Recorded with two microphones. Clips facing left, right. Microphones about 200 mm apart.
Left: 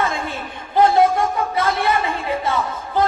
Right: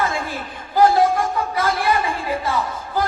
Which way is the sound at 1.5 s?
25° left (ahead or behind).